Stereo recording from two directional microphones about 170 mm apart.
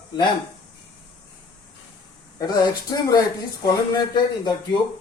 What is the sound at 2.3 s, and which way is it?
A woman's voice, 20° left (ahead or behind).